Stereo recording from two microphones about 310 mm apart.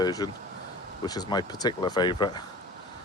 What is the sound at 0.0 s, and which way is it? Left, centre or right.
Speech, centre.